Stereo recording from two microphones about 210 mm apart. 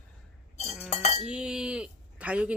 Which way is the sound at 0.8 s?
30° left (ahead or behind).